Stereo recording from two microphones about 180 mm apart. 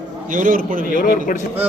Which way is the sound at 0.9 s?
50° left (ahead or behind).